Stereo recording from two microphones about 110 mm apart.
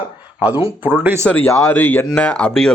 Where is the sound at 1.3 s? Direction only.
15° left (ahead or behind).